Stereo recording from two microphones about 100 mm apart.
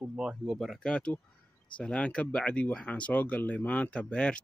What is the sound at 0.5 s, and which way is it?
Speech, 5° left (ahead or behind).